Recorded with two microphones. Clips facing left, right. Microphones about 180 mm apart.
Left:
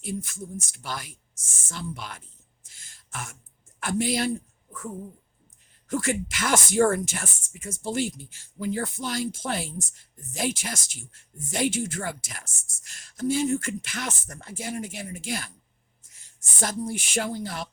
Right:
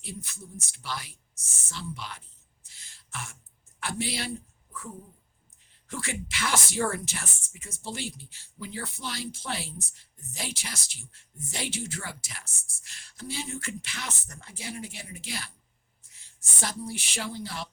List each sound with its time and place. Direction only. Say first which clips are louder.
0.0 s speech: left 9 dB; 50° left (ahead or behind)
2.6 s throat clearing: even; 45° left (ahead or behind)
3.8 s speech: left 7 dB; 45° left (ahead or behind)
5.9 s speech: left 9 dB; 45° left (ahead or behind)